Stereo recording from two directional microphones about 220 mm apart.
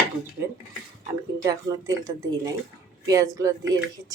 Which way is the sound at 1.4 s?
15° right (ahead or behind).